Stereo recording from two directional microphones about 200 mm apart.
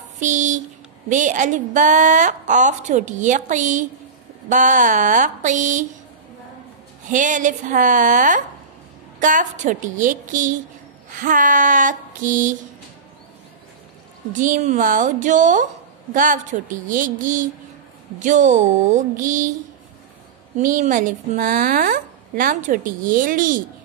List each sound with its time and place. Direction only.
0.2 s a woman's voice: 40° right (ahead or behind)
7.1 s a woman's voice: 40° right (ahead or behind)
14.3 s a woman's voice: 40° right (ahead or behind)
20.5 s a woman's voice: 40° right (ahead or behind)